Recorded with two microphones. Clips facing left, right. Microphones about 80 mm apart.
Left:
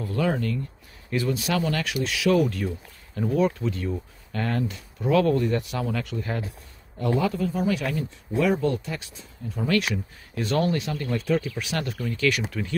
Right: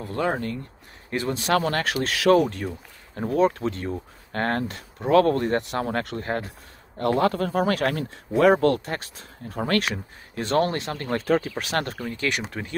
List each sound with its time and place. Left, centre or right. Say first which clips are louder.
0.0 s speech: even; right
2.4 s speech: left 1 dB; right
4.3 s speech: right 2 dB; right
7.0 s speech: right 3 dB; right
8.8 s speech: right 3 dB; right